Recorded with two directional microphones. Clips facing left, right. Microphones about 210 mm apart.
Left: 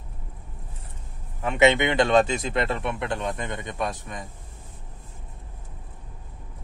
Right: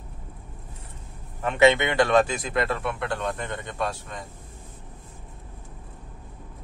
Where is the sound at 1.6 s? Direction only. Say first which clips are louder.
Even; 15° left (ahead or behind).